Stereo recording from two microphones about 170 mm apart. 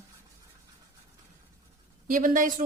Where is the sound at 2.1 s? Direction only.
50° right (ahead or behind).